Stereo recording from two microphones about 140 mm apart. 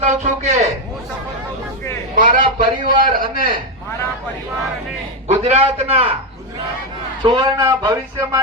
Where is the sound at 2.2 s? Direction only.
70° right (ahead or behind).